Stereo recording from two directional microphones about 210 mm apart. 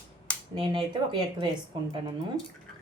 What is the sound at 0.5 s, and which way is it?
Speech, 25° right (ahead or behind).